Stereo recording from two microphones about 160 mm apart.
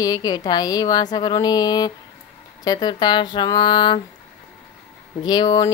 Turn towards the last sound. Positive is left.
turn(degrees=25)  # may be behind; listen again after turning